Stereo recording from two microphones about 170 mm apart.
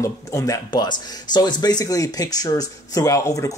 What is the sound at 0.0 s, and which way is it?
A man's voice, 20° left (ahead or behind).